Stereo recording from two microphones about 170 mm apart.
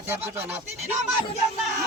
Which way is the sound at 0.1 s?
10° right (ahead or behind).